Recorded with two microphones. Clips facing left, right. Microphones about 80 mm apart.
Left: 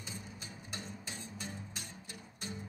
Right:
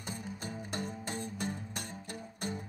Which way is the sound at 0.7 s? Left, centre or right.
Right.